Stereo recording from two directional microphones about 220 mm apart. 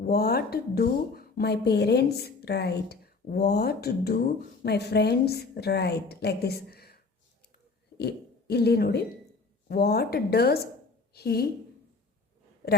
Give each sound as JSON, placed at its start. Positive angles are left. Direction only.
{"t": 0.0, "sound": "a woman's voice", "side_deg": 45}